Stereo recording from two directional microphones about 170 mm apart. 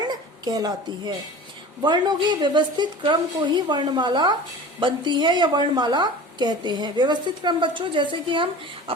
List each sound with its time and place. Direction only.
0.1 s a woman's voice: 25° right (ahead or behind)